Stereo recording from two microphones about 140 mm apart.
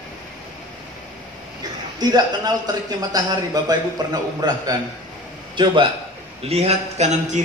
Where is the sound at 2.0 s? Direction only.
30° right (ahead or behind).